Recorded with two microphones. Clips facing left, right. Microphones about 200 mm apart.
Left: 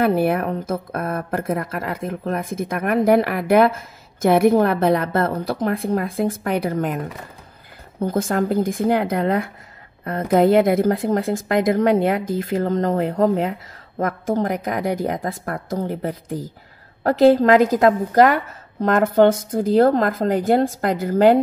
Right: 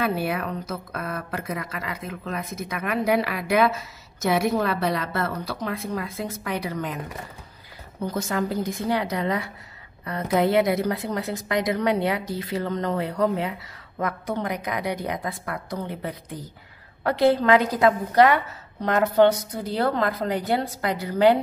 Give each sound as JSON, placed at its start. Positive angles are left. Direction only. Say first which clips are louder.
{"t": 0.0, "sound": "speech", "louder": "left 7 dB", "side_deg": 50}
{"t": 8.0, "sound": "speech", "louder": "left 6 dB", "side_deg": 50}